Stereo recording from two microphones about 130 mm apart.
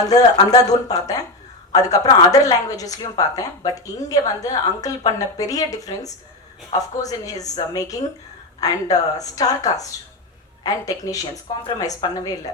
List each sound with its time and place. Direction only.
0.0 s a woman's voice: 30° left (ahead or behind)